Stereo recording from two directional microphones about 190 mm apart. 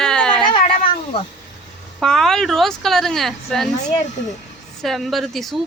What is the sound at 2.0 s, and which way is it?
A woman's voice, centre (ahead or behind).